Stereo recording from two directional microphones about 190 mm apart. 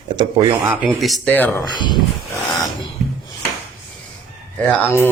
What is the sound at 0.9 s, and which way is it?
Speech, centre (ahead or behind).